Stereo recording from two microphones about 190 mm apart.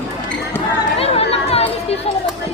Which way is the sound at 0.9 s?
30° left (ahead or behind).